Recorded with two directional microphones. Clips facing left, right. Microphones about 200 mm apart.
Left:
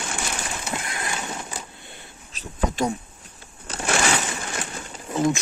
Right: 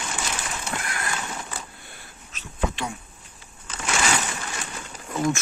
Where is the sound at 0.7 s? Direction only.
25° left (ahead or behind).